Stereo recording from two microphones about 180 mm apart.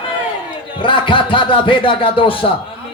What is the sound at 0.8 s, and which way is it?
A man's voice, 25° left (ahead or behind).